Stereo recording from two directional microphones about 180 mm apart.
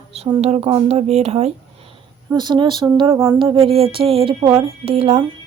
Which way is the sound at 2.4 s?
25° right (ahead or behind).